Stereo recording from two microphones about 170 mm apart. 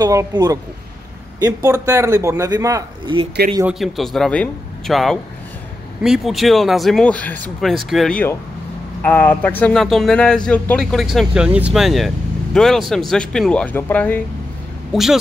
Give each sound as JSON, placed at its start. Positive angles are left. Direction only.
{"t": 0.0, "sound": "a man's voice", "side_deg": -20}
{"t": 3.6, "sound": "speech", "side_deg": 0}
{"t": 14.9, "sound": "speech", "side_deg": 0}